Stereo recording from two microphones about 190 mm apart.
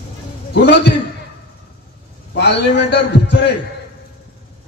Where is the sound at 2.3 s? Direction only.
65° left (ahead or behind).